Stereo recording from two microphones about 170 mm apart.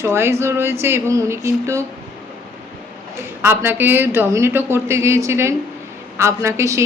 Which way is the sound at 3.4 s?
15° right (ahead or behind).